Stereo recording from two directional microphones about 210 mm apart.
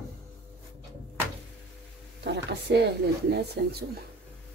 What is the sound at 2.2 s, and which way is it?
Speech, 55° right (ahead or behind).